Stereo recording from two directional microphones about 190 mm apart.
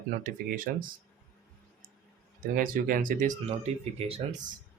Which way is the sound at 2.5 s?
50° right (ahead or behind).